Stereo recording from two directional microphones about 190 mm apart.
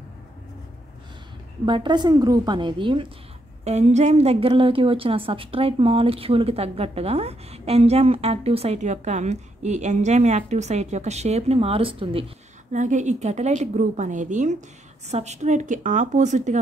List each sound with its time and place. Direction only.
1.7 s a woman's voice: 25° right (ahead or behind)
3.6 s a woman's voice: 35° right (ahead or behind)
12.7 s a woman's voice: 40° right (ahead or behind)